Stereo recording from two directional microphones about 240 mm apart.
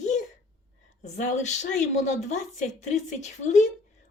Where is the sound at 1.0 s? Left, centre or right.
Left.